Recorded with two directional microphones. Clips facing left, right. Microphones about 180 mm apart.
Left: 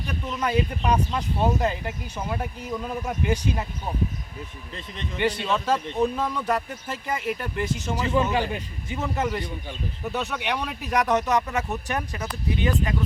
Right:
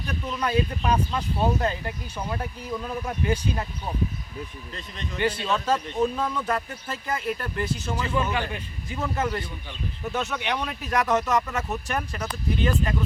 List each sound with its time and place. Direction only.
0.1 s speech: 10° left (ahead or behind)
5.1 s speech: 15° left (ahead or behind)